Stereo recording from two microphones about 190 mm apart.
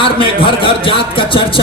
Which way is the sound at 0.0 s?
30° left (ahead or behind).